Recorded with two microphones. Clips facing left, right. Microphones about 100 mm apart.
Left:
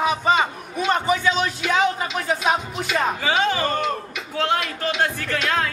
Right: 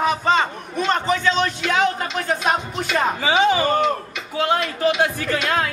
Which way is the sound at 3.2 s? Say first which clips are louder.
Right 4 dB; 10° right (ahead or behind).